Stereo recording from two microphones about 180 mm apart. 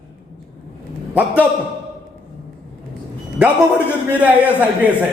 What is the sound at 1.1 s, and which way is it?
Speech, 10° right (ahead or behind).